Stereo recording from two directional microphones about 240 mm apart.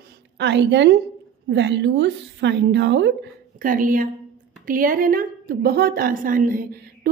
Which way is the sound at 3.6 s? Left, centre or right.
Right.